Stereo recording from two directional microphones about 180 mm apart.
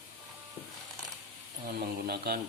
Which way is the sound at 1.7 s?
60° right (ahead or behind).